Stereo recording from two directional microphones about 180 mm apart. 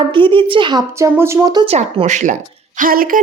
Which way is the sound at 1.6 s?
35° right (ahead or behind).